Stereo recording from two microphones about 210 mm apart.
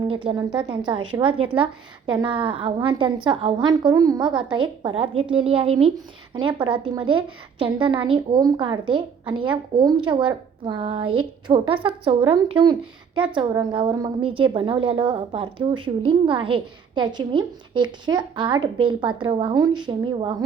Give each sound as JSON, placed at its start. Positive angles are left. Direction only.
{"t": 0.1, "sound": "a woman's voice", "side_deg": -25}